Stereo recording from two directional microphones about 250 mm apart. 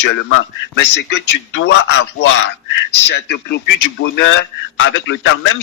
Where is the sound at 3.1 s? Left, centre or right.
Left.